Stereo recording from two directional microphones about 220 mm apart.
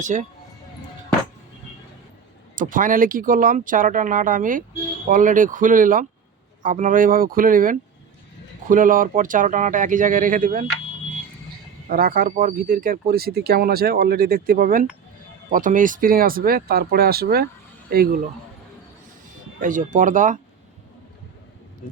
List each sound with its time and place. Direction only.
0.0 s speech: 35° right (ahead or behind)
2.6 s speech: 35° right (ahead or behind)
11.9 s a man's voice: 40° right (ahead or behind)
19.5 s speech: 35° right (ahead or behind)